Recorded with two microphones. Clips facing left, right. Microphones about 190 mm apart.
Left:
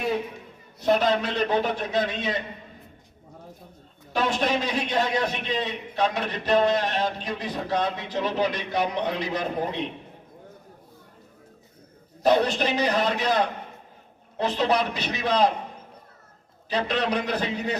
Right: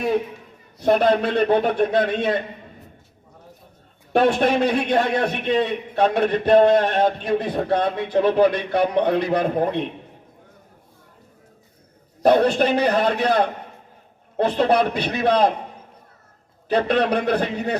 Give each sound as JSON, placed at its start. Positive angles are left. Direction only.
{"t": 0.8, "sound": "a man's voice", "side_deg": -55}
{"t": 4.1, "sound": "a man's voice", "side_deg": -55}
{"t": 12.2, "sound": "a man's voice", "side_deg": -55}
{"t": 16.6, "sound": "a man's voice", "side_deg": -55}